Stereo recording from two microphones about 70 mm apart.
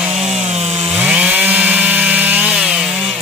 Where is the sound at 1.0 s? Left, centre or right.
Centre.